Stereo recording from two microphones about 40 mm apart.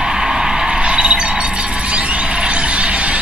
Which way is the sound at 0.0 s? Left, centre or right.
Centre.